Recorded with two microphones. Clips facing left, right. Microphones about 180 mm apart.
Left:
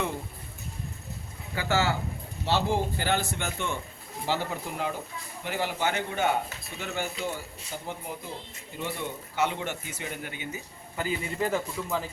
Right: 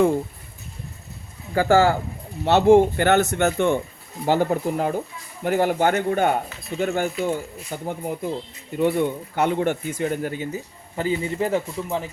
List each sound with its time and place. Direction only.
1.5 s speech: 50° right (ahead or behind)
2.4 s speech: 65° right (ahead or behind); by 12.0 s 25° right (ahead or behind)